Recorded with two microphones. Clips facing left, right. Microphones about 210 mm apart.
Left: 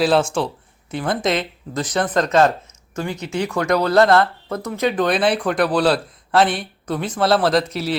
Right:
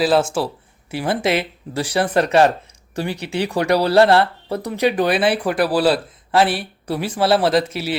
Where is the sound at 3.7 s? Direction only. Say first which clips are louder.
Right 1 dB; 35° right (ahead or behind).